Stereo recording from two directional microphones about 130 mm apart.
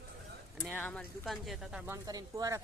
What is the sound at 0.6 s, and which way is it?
Speech, 10° left (ahead or behind).